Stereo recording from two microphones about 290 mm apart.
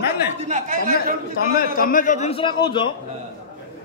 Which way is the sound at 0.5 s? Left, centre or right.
Right.